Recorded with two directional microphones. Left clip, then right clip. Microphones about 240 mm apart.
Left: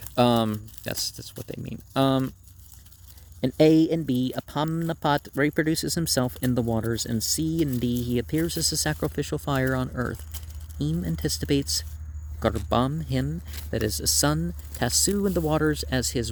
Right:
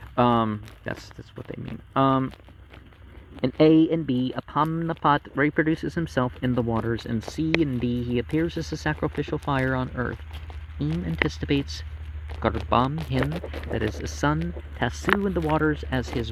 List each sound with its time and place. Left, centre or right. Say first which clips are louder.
0.3 s speech: right 1 dB; left
3.9 s speech: right 1 dB; left